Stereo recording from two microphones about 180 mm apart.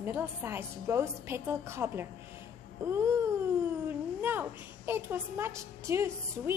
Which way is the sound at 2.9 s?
15° right (ahead or behind).